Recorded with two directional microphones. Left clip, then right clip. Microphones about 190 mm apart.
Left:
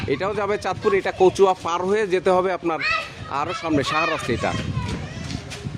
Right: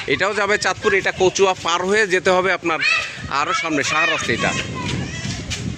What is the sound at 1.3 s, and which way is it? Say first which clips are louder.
Speech: even; 15° left (ahead or behind).